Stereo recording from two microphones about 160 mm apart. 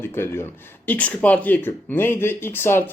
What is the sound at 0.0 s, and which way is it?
Speech, 15° left (ahead or behind).